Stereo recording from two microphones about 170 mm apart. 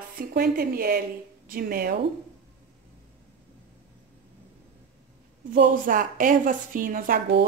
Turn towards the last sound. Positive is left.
turn(degrees=-55)  # may be behind; listen again after turning